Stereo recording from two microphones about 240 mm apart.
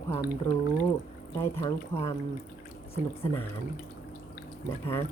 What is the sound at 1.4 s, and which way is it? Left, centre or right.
Speech, centre.